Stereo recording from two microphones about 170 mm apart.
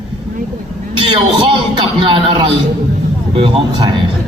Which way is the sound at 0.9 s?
30° right (ahead or behind).